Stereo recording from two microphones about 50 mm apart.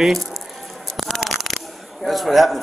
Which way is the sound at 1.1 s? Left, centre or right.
Centre.